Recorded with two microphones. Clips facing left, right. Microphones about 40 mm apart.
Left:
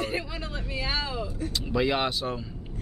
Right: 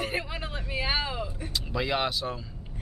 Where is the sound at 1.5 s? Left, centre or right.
Centre.